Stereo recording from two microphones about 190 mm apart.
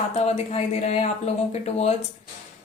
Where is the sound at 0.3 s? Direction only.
35° left (ahead or behind).